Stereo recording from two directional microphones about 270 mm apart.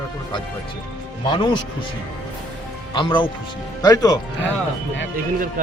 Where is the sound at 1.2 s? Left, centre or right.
Centre.